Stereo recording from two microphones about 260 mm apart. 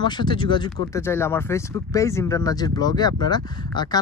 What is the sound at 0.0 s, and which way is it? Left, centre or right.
Speech, centre.